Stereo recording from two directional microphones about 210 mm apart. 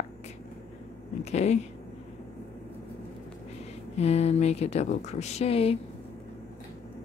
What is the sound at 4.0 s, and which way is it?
A woman's voice, 30° left (ahead or behind).